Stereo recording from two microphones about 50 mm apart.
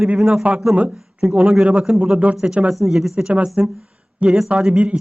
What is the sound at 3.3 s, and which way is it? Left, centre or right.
A man's voice, centre.